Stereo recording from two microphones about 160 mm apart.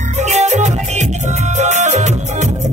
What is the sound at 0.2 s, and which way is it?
Music, 45° right (ahead or behind).